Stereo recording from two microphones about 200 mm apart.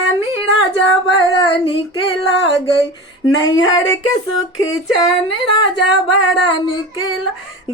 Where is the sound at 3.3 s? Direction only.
70° left (ahead or behind).